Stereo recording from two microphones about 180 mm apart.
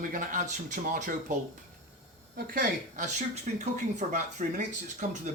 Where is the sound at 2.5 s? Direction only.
55° right (ahead or behind).